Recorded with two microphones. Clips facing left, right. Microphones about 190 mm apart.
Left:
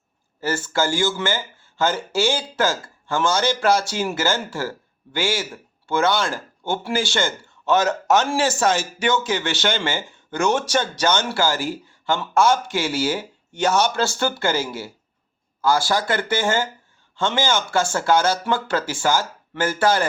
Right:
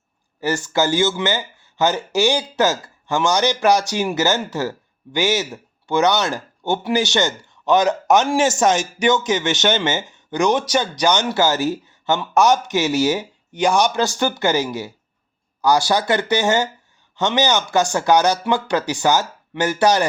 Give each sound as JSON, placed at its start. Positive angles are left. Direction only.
{"t": 0.4, "sound": "speech", "side_deg": -15}